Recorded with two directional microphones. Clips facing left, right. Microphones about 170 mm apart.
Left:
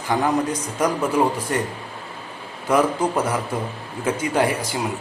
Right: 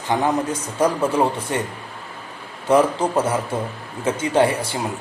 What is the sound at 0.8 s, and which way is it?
Speech, 25° right (ahead or behind).